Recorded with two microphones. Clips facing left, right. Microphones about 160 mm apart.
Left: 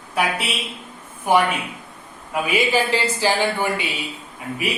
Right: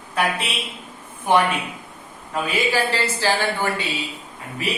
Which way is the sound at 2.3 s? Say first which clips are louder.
Left 2 dB; 15° left (ahead or behind).